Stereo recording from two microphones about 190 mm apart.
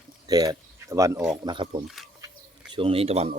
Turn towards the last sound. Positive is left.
turn(degrees=-30)  # may be behind; listen again after turning